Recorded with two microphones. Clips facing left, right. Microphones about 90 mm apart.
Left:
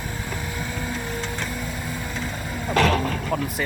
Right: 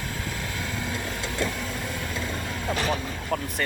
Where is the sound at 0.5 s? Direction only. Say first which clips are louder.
Left 2 dB; 5° left (ahead or behind).